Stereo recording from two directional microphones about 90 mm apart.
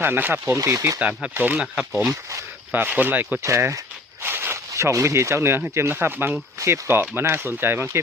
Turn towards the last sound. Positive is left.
turn(degrees=-25)  # may be behind; listen again after turning